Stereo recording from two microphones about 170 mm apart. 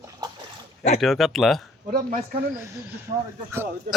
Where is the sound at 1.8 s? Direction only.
60° right (ahead or behind).